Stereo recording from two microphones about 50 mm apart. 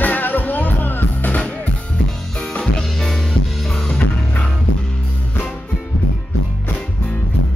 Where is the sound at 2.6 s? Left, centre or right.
Centre.